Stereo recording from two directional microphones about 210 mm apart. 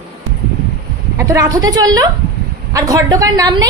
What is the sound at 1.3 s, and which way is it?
A woman's voice, 15° right (ahead or behind).